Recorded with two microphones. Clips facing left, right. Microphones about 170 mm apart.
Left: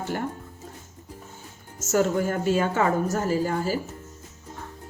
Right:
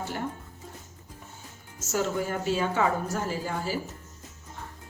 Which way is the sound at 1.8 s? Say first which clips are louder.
Left 6 dB; 50° left (ahead or behind).